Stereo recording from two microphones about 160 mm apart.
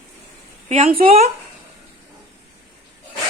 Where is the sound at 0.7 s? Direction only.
45° right (ahead or behind).